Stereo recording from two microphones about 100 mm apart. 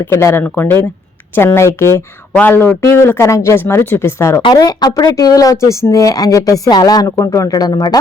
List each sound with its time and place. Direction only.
0.0 s speech: 25° left (ahead or behind)
2.3 s speech: 10° left (ahead or behind)
2.6 s speech: 25° left (ahead or behind)
4.5 s speech: 40° left (ahead or behind)